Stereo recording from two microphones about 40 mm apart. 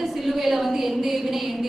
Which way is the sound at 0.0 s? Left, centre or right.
Centre.